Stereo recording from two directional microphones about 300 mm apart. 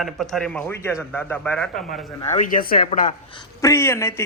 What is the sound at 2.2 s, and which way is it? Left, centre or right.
Speech, left.